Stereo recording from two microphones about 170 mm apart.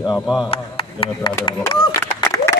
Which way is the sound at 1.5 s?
25° left (ahead or behind).